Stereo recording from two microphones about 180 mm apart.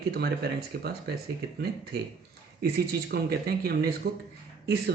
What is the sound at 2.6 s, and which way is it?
Speech, 60° right (ahead or behind).